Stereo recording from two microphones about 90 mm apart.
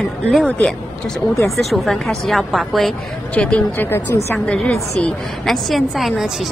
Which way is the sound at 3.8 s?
25° left (ahead or behind).